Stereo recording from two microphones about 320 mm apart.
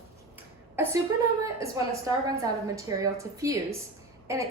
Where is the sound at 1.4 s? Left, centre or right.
Centre.